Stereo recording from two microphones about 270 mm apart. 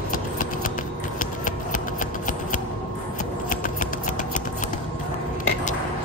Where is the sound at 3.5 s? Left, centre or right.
Left.